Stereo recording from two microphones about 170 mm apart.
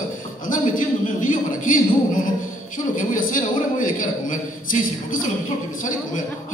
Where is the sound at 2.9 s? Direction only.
50° left (ahead or behind).